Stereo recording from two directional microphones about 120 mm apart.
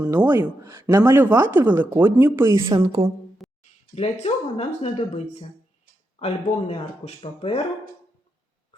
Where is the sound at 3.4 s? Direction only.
Centre (ahead or behind).